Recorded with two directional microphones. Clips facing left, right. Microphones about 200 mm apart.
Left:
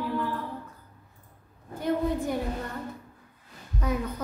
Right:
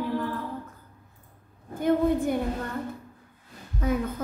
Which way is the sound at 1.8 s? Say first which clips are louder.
Right 4 dB; 50° right (ahead or behind).